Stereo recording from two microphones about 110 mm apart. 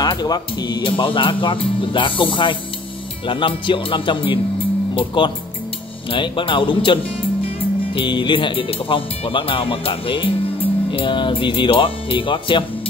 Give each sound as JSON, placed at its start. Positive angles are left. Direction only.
{"t": 0.0, "sound": "speech", "side_deg": 40}